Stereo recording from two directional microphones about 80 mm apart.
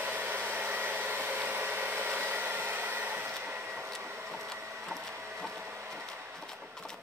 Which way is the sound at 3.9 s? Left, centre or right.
Right.